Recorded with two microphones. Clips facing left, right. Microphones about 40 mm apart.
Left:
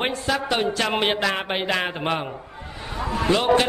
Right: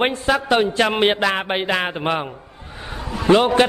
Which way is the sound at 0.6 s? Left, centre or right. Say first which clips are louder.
Right 5 dB; centre.